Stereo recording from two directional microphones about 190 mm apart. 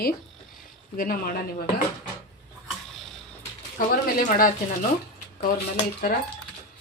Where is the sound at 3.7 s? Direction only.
45° left (ahead or behind).